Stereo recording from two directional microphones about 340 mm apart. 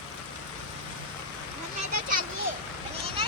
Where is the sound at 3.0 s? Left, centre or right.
Centre.